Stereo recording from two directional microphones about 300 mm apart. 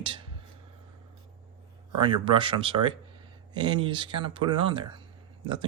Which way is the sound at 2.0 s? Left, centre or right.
Centre.